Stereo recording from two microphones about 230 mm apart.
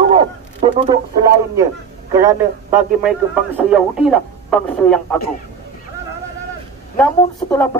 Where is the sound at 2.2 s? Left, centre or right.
Centre.